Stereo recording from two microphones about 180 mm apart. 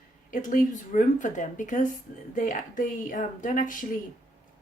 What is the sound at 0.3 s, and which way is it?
Speech, 45° left (ahead or behind).